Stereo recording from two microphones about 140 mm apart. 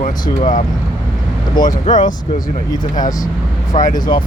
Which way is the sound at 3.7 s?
65° left (ahead or behind).